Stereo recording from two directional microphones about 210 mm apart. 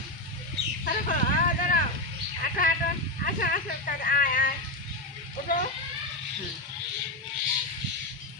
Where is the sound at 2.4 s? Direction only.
40° left (ahead or behind).